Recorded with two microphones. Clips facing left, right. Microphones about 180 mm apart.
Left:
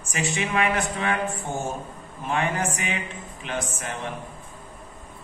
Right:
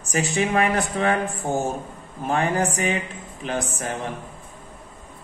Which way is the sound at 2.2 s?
40° right (ahead or behind).